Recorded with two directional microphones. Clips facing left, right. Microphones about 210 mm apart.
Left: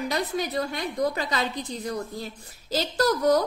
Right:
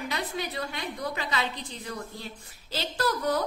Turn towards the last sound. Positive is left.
turn(degrees=40)  # may be behind; listen again after turning